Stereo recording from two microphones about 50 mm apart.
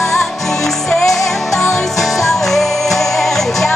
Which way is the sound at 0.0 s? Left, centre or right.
Centre.